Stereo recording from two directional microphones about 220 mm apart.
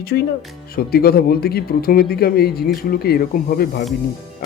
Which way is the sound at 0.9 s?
45° left (ahead or behind).